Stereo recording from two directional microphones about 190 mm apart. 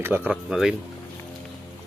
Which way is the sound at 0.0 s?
10° right (ahead or behind).